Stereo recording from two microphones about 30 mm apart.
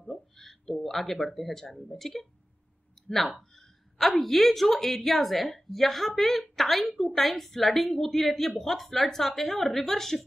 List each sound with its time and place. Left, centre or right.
0.1 s a sound: centre
0.7 s speech: centre
0.9 s a woman's voice: centre